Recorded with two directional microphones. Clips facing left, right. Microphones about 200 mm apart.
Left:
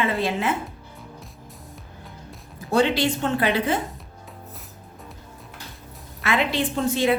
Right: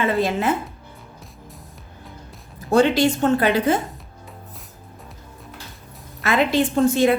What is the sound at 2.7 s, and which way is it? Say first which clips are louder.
A woman's voice: right 4 dB; 45° right (ahead or behind).